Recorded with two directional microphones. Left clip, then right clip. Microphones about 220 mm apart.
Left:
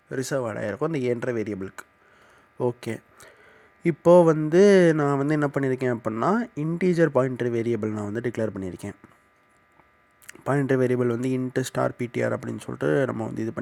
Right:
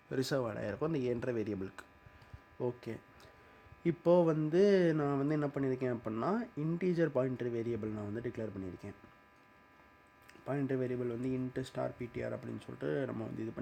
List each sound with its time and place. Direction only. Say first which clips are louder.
0.1 s speech: left 8 dB; 15° left (ahead or behind); by 9.0 s 35° left (ahead or behind)
10.2 s speech: left 13 dB; 35° left (ahead or behind)